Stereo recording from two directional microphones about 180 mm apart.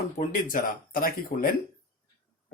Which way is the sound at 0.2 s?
45° left (ahead or behind).